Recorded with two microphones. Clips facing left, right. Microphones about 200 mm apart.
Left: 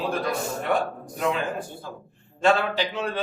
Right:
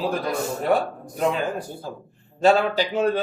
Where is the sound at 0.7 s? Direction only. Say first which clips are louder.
Right 3 dB; 35° right (ahead or behind).